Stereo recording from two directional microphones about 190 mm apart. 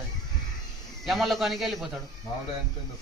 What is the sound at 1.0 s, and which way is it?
Speech, centre (ahead or behind).